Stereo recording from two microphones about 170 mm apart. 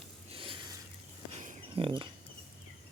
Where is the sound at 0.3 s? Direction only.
30° right (ahead or behind).